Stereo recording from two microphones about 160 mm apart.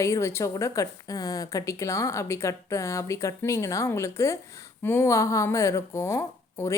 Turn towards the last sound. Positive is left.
turn(degrees=15)  # may be behind; listen again after turning